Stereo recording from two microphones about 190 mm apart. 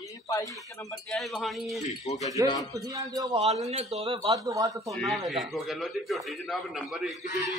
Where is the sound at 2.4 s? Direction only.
20° left (ahead or behind).